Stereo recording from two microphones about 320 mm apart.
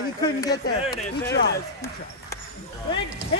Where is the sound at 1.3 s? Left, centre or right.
Left.